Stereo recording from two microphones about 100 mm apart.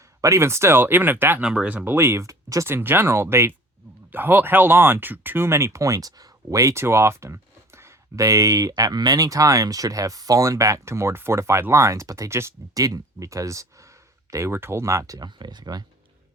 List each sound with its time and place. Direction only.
0.2 s speech: 30° right (ahead or behind)
1.4 s speech: 10° right (ahead or behind); by 15.3 s 35° right (ahead or behind)
15.4 s speech: 45° right (ahead or behind)